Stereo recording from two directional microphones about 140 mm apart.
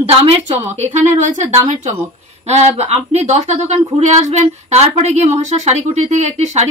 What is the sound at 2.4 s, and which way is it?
Speech, 50° right (ahead or behind).